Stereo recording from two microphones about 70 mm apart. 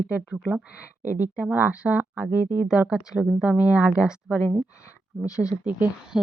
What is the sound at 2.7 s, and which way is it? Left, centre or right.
Speech, centre.